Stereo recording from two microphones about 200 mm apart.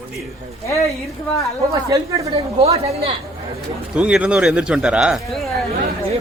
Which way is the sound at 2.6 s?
30° right (ahead or behind).